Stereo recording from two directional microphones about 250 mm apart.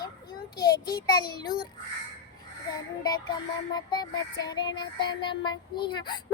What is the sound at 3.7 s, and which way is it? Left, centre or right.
Music, centre.